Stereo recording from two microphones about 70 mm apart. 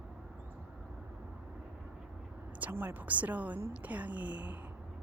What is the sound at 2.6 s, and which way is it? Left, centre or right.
A woman's voice, right.